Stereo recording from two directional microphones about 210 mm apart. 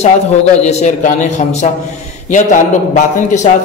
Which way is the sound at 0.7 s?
35° left (ahead or behind).